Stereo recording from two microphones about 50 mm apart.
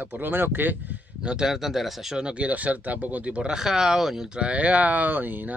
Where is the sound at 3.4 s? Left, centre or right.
Centre; by 5.5 s right.